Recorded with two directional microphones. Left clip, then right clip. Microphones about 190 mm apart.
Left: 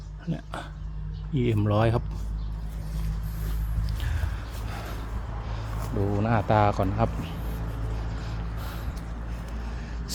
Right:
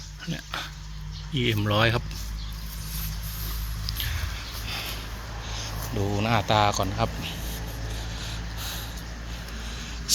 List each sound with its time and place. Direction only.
0.3 s speech: 15° left (ahead or behind)
6.0 s speech: centre (ahead or behind)
6.5 s a man's voice: 20° left (ahead or behind)